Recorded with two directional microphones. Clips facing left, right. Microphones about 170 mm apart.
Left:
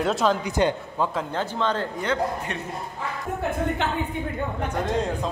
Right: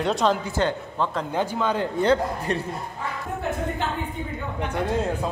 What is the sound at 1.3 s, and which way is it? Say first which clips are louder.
Speech: right 1 dB; 10° right (ahead or behind).